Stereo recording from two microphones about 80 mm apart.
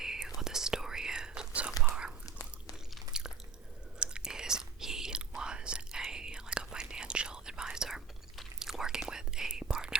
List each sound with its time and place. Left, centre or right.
0.0 s whispering: centre
3.1 s biting: centre
4.0 s whispering: centre